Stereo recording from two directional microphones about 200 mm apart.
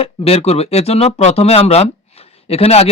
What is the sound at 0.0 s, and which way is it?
Speech, 30° left (ahead or behind).